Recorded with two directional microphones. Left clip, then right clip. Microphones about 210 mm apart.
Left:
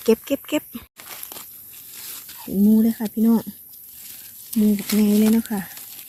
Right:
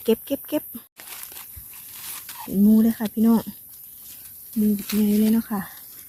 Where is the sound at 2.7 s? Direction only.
15° right (ahead or behind).